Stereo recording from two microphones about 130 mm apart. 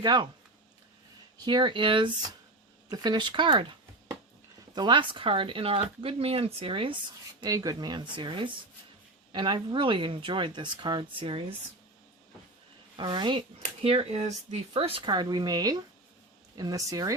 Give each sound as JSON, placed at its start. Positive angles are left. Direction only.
{"t": 0.0, "sound": "speech", "side_deg": -35}
{"t": 1.5, "sound": "speech", "side_deg": -35}
{"t": 7.4, "sound": "speech", "side_deg": -30}
{"t": 13.0, "sound": "speech", "side_deg": -35}
{"t": 13.8, "sound": "speech", "side_deg": -45}
{"t": 15.1, "sound": "speech", "side_deg": -35}